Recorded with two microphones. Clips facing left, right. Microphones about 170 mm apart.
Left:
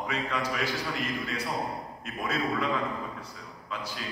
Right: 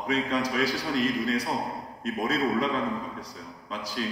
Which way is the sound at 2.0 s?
35° right (ahead or behind).